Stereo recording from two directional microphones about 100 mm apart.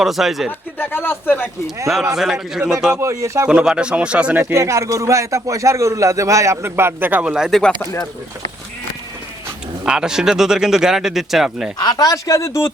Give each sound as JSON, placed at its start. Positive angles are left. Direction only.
{"t": 0.0, "sound": "speech", "side_deg": 0}
{"t": 0.8, "sound": "speech", "side_deg": 20}
{"t": 2.1, "sound": "speech", "side_deg": -5}
{"t": 2.9, "sound": "speech", "side_deg": -30}
{"t": 3.4, "sound": "speech", "side_deg": -10}
{"t": 9.8, "sound": "speech", "side_deg": -10}
{"t": 11.8, "sound": "speech", "side_deg": 45}